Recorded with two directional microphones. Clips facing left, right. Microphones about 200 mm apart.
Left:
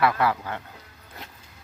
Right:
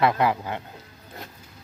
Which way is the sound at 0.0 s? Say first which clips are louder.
Right 1 dB; 20° right (ahead or behind).